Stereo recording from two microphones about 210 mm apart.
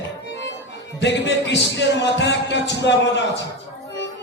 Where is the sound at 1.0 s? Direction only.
60° left (ahead or behind).